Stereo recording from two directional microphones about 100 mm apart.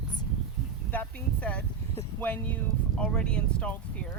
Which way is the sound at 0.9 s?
15° left (ahead or behind).